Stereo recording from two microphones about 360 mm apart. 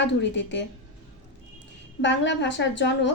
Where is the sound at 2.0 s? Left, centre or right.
Left.